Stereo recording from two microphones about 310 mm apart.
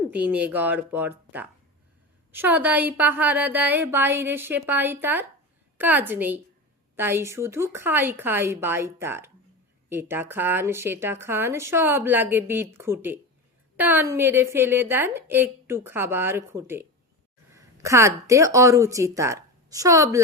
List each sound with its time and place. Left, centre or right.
0.1 s a woman's voice: centre